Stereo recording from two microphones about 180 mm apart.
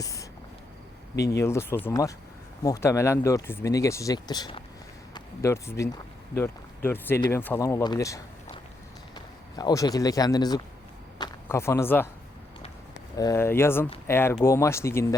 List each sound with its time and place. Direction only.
0.0 s a sound: 20° left (ahead or behind)
1.1 s speech: 65° left (ahead or behind)
1.4 s speech: 15° left (ahead or behind)
13.1 s speech: 15° left (ahead or behind)